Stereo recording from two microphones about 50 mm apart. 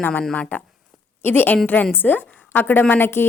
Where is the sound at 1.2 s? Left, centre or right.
Left.